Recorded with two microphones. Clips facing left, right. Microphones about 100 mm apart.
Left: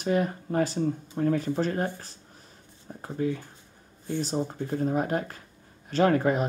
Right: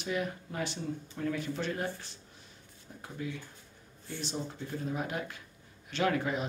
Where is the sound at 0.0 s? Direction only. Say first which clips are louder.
Left 8 dB; 40° left (ahead or behind).